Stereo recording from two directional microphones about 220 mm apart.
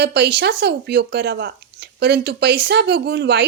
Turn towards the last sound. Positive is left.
turn(degrees=-50)  # may be behind; listen again after turning